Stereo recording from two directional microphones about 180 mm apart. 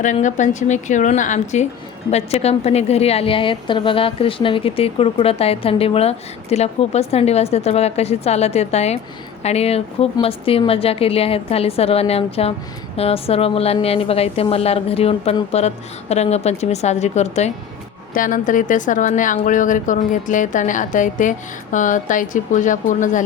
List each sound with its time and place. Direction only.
0.0 s a woman's voice: 45° left (ahead or behind)